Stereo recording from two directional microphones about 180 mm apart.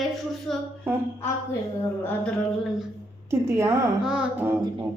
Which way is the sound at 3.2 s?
15° right (ahead or behind).